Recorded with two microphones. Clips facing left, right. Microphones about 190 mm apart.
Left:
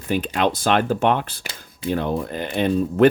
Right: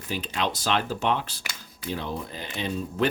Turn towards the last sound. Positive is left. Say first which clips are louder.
# left 10 dB
turn(degrees=55)  # may be behind; listen again after turning